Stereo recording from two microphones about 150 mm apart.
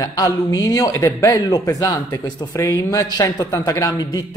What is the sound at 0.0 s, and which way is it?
A man's voice, 25° left (ahead or behind).